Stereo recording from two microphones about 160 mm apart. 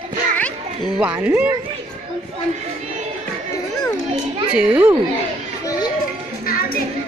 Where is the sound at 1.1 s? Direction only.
10° right (ahead or behind).